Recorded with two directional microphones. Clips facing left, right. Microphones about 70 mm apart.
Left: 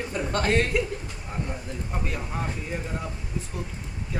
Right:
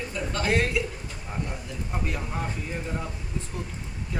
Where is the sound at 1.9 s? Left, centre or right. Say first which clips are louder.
Right 1 dB; centre.